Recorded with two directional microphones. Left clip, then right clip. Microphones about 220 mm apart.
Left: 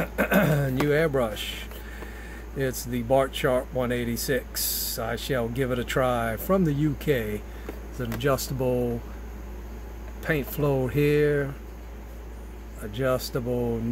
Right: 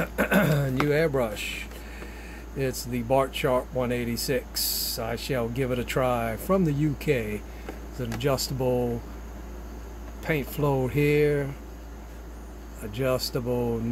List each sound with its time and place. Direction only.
0.0 s a sound: centre (ahead or behind)
0.8 s speech: centre (ahead or behind)
10.2 s speech: centre (ahead or behind)
12.9 s speech: centre (ahead or behind)